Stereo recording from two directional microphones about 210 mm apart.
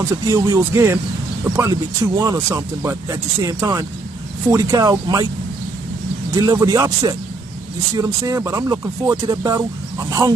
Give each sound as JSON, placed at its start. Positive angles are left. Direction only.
{"t": 0.3, "sound": "speech", "side_deg": -15}
{"t": 6.3, "sound": "speech", "side_deg": -15}